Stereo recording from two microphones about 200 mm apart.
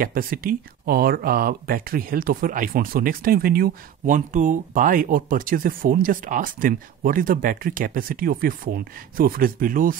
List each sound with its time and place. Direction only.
0.0 s speech: 45° right (ahead or behind)